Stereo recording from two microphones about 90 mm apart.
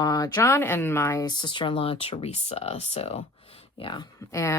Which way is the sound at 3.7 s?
65° left (ahead or behind).